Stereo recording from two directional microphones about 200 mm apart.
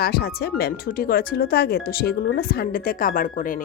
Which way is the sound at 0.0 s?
50° left (ahead or behind).